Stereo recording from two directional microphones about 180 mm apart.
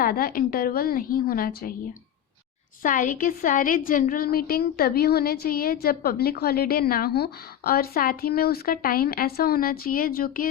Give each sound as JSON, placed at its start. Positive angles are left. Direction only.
{"t": 0.0, "sound": "a woman's voice", "side_deg": 55}
{"t": 2.8, "sound": "a woman's voice", "side_deg": 50}